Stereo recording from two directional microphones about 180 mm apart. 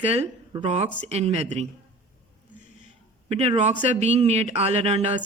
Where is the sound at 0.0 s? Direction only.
35° right (ahead or behind).